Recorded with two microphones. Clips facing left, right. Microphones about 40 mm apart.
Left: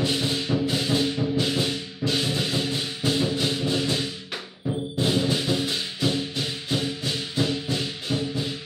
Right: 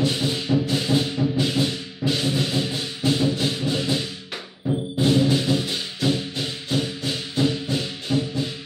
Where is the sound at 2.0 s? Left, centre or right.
Centre.